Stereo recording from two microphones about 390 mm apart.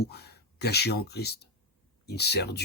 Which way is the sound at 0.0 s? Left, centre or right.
Left.